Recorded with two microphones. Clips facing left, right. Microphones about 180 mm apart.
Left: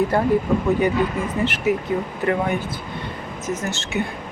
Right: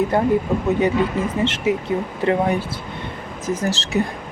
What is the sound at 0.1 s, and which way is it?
Speech, 20° right (ahead or behind).